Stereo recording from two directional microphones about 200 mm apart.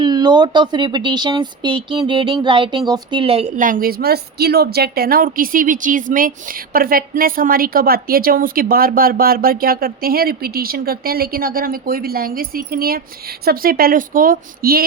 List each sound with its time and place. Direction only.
0.0 s speech: 20° right (ahead or behind)
3.6 s a woman's voice: 45° right (ahead or behind)